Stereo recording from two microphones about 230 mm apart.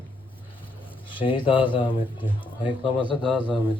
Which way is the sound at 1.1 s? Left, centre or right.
Left.